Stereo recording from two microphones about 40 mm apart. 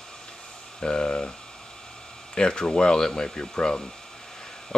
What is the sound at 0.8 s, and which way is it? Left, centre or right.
Speech, left.